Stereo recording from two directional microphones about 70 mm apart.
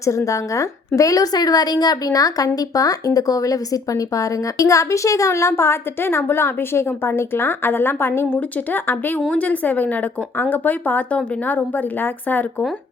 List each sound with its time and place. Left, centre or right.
0.3 s a woman's voice: left